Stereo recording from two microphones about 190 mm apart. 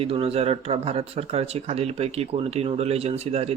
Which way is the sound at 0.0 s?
30° right (ahead or behind).